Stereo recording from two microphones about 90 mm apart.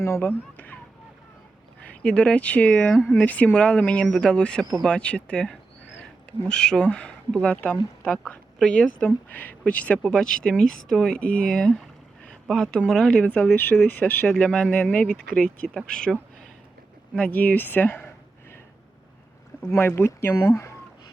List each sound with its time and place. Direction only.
0.0 s speech: 30° left (ahead or behind)
1.8 s a woman's voice: 15° left (ahead or behind)
9.0 s speech: 20° left (ahead or behind)
17.2 s speech: 15° left (ahead or behind)
20.0 s speech: 25° left (ahead or behind)